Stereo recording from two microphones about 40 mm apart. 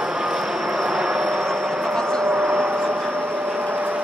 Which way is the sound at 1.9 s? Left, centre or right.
Centre.